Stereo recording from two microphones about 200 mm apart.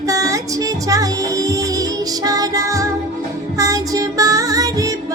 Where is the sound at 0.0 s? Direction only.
15° right (ahead or behind).